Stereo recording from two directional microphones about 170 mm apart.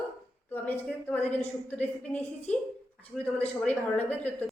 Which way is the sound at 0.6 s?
10° left (ahead or behind).